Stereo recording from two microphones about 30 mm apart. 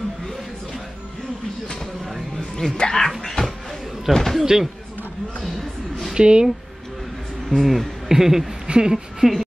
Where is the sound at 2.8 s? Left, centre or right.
Left.